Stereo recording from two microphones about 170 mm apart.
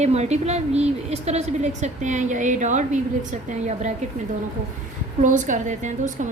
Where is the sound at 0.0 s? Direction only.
40° right (ahead or behind).